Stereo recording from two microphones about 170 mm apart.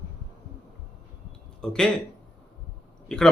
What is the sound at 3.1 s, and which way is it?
Speech, 5° left (ahead or behind).